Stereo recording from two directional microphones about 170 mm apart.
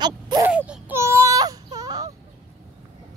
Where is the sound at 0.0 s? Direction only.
25° right (ahead or behind).